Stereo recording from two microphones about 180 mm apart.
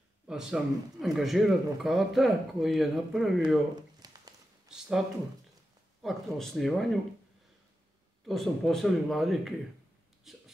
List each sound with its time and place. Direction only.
0.3 s a man's voice: 5° right (ahead or behind)
4.0 s a sound: 20° right (ahead or behind)
4.6 s speech: 5° right (ahead or behind)
6.0 s a man's voice: centre (ahead or behind)
8.3 s a man's voice: centre (ahead or behind)
10.3 s wail: centre (ahead or behind)